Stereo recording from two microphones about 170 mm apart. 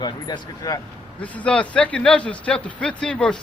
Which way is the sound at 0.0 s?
25° left (ahead or behind).